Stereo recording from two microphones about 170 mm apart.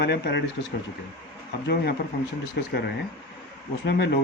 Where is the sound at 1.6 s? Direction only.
70° left (ahead or behind).